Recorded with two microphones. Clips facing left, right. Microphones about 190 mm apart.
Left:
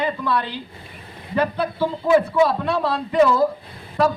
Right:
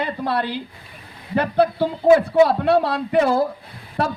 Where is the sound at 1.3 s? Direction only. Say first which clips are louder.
Right 4 dB; 65° right (ahead or behind).